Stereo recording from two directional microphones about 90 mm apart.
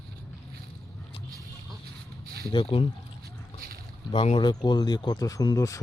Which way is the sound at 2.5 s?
85° left.